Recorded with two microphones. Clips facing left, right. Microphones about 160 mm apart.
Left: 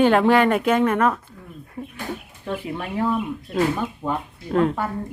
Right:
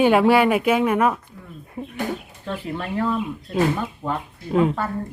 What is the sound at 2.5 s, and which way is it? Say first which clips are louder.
Speech: even; 10° left (ahead or behind).